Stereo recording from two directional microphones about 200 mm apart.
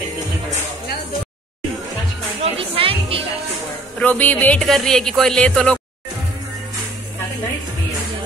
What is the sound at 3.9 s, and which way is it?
Speech, 10° left (ahead or behind).